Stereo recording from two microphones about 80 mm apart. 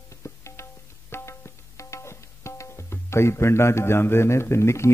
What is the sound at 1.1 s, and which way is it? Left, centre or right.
Tabla, left.